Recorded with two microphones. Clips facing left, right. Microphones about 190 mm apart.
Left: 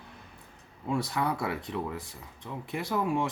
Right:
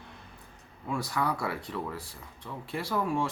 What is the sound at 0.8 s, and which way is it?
Speech, 25° left (ahead or behind).